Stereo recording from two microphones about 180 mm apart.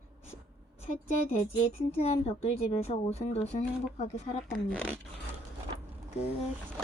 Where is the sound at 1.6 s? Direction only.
35° left (ahead or behind).